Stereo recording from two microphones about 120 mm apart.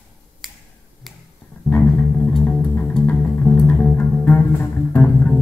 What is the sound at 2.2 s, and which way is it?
Music, 5° left (ahead or behind).